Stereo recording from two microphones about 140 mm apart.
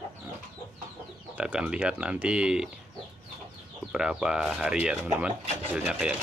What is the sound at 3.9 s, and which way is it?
Speech, 5° right (ahead or behind).